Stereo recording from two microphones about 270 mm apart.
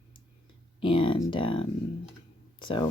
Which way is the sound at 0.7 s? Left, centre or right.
Centre.